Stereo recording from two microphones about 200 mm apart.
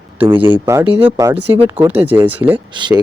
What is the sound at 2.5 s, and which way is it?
Speech, 25° right (ahead or behind).